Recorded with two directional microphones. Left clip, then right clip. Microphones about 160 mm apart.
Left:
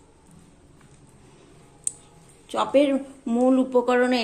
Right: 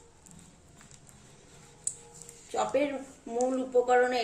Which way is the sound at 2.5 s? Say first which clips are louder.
Left 8 dB; 50° left (ahead or behind).